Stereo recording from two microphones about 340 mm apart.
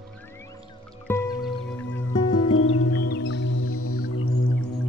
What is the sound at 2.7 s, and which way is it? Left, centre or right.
Music, left.